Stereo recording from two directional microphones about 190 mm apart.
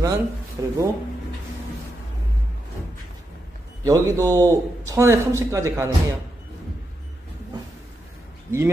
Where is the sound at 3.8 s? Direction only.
20° right (ahead or behind).